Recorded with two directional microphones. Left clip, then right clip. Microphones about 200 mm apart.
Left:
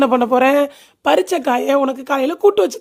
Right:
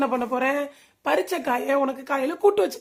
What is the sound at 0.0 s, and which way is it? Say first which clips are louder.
Speech: left 10 dB; 40° left (ahead or behind).